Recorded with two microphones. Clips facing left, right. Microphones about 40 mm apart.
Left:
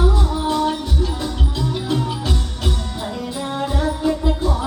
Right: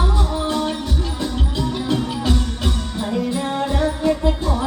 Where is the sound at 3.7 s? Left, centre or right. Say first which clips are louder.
Right 1 dB; centre.